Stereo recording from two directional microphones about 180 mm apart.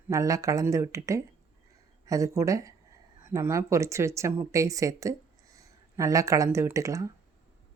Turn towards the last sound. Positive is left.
turn(degrees=-15)  # may be behind; listen again after turning